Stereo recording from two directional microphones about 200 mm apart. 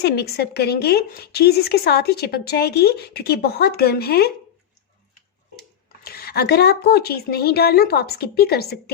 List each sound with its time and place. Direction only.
0.0 s a woman's voice: 55° left (ahead or behind)
6.0 s a woman's voice: 50° left (ahead or behind)